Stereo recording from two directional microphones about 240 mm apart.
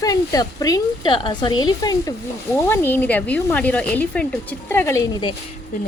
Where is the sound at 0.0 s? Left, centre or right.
Centre.